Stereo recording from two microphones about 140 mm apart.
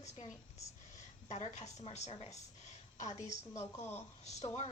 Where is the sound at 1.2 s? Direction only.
55° left (ahead or behind).